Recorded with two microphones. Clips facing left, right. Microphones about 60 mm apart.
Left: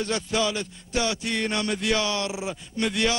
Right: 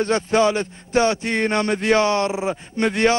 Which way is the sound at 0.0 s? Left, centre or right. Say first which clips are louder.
Right 8 dB; right.